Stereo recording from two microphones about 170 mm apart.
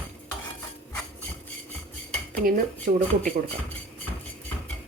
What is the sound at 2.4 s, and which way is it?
Speech, 55° right (ahead or behind).